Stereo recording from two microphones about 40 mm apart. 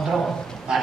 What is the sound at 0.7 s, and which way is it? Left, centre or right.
Clip-clop, centre.